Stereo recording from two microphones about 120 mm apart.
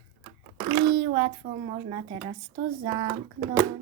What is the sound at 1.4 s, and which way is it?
Speech, 90° right.